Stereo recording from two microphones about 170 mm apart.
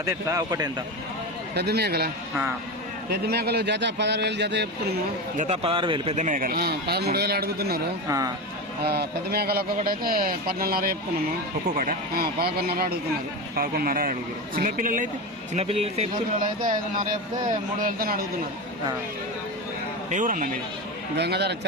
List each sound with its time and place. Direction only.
0.0 s speech: 20° right (ahead or behind)
1.5 s a man's voice: 70° right (ahead or behind)
3.1 s a man's voice: 70° right (ahead or behind); by 4.9 s 85° right
5.4 s speech: 35° right (ahead or behind)
6.1 s a man's voice: 50° right (ahead or behind); by 7.8 s 65° right (ahead or behind)
8.0 s speech: 20° right (ahead or behind)
8.8 s speech: 70° right (ahead or behind); by 15.0 s 50° right (ahead or behind)
15.5 s speech: 40° right (ahead or behind)
16.4 s speech: 55° right (ahead or behind)
20.1 s speech: 50° right (ahead or behind)
21.2 s a man's voice: 75° right (ahead or behind)